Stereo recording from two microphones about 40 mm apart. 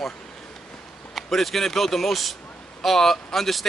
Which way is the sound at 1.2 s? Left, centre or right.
Centre.